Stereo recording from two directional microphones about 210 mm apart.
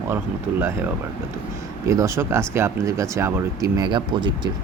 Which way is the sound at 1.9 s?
15° right (ahead or behind).